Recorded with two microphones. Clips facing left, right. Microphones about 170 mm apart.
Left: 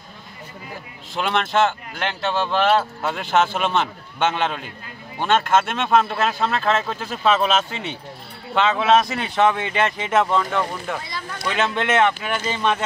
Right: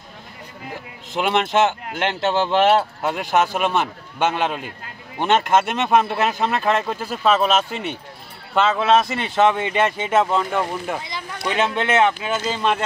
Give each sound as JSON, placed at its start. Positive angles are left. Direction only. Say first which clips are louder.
{"t": 1.1, "sound": "a man's voice", "louder": "right 2 dB", "side_deg": -15}